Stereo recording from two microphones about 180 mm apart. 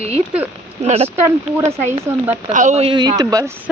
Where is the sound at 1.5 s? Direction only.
15° right (ahead or behind).